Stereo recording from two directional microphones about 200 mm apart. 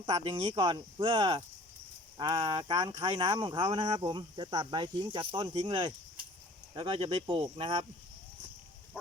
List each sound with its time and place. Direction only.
0.0 s speech: 25° right (ahead or behind)